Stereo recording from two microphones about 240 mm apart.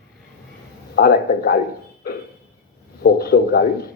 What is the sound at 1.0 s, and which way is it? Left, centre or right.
A man's voice, left.